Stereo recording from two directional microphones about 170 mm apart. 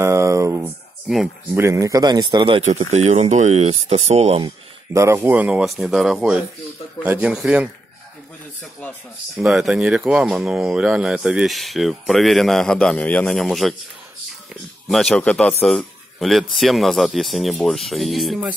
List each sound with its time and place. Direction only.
0.0 s a sound: 15° right (ahead or behind)
1.0 s speech: centre (ahead or behind)
1.5 s a man's voice: 15° right (ahead or behind)
2.6 s speech: 40° right (ahead or behind)
4.9 s a man's voice: 15° right (ahead or behind)
9.4 s speech: centre (ahead or behind)
14.9 s speech: centre (ahead or behind)